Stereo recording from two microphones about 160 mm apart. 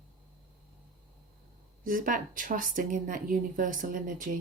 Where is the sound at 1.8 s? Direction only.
60° right (ahead or behind).